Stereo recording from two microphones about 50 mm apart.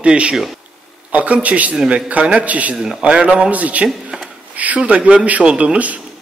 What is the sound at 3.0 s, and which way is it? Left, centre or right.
Speech, right.